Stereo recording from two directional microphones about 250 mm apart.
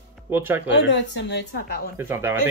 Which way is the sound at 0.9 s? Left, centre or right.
Left.